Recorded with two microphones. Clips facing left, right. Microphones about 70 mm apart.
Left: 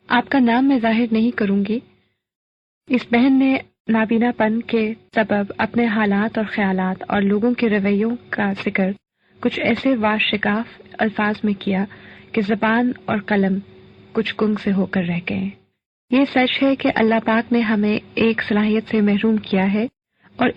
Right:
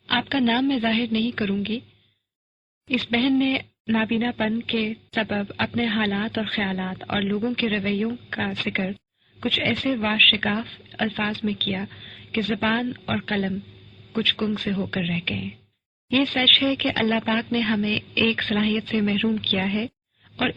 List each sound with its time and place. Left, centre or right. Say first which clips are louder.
0.1 s speech: left 6 dB; left
2.9 s speech: left 7 dB; left
11.8 s a sound: left 8 dB; left
12.7 s speech: left 7 dB; left